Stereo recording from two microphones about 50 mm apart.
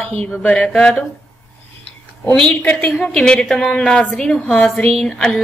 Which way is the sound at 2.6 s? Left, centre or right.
Left.